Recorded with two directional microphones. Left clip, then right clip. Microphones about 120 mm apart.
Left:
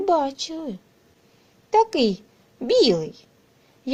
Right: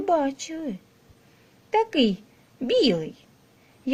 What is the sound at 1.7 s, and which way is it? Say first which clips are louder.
Speech: left 3 dB; 25° left (ahead or behind).